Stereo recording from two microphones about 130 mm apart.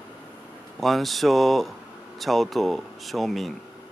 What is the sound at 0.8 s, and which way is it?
Speech, centre (ahead or behind).